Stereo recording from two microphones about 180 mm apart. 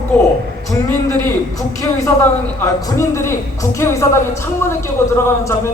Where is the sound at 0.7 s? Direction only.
15° left (ahead or behind).